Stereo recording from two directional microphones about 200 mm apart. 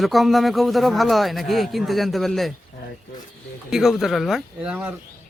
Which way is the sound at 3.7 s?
Centre (ahead or behind).